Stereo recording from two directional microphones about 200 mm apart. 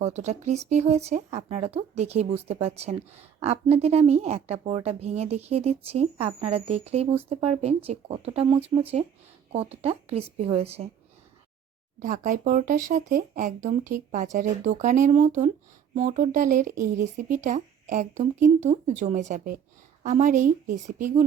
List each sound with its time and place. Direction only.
0.0 s speech: 35° right (ahead or behind)
11.9 s speech: 40° right (ahead or behind)